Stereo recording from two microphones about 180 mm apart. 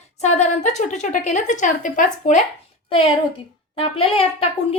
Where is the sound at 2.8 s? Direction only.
30° left (ahead or behind).